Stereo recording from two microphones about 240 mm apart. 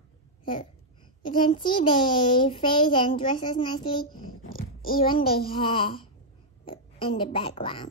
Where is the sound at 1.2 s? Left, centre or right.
Centre.